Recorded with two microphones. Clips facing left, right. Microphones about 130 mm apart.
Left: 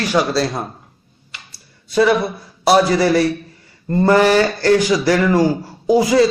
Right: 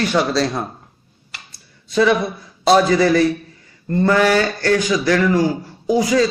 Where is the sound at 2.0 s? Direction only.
5° left (ahead or behind).